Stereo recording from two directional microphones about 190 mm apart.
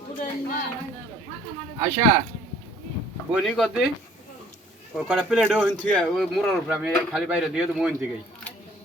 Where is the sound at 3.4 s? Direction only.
Centre (ahead or behind).